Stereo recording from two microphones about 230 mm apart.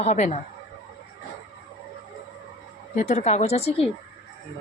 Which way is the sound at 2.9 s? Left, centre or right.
Left.